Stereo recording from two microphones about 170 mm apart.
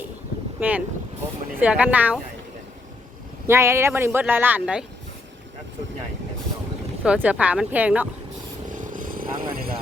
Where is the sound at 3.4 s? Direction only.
15° right (ahead or behind).